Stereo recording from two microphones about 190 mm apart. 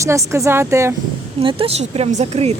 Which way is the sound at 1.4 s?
30° right (ahead or behind).